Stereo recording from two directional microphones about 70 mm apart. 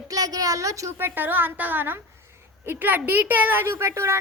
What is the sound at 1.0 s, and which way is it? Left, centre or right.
A woman's voice, right.